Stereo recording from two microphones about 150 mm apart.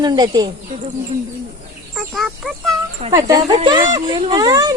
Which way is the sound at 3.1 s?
25° right (ahead or behind).